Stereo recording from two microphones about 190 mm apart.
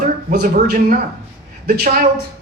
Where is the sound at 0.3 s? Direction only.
50° right (ahead or behind).